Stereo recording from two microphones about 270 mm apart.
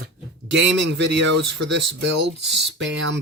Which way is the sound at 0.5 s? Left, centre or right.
Right.